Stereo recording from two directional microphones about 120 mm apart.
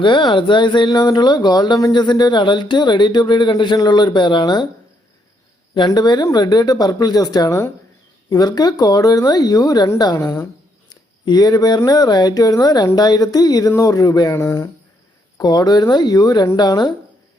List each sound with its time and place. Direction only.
0.0 s speech: 40° left (ahead or behind)
5.7 s speech: 35° left (ahead or behind)
10.0 s a sound: 35° left (ahead or behind)
11.3 s speech: 35° left (ahead or behind)
15.4 s speech: 35° left (ahead or behind)